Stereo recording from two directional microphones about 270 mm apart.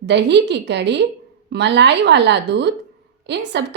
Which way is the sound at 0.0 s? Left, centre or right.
Right.